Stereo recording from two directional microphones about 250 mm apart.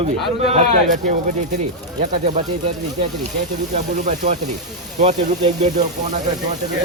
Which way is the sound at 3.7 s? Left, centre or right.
Right.